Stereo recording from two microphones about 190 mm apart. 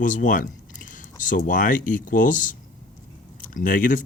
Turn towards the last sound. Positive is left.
turn(degrees=45)  # may be behind; listen again after turning